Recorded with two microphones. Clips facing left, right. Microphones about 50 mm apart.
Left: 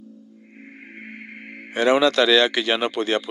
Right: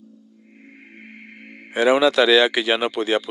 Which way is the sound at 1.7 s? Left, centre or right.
Centre.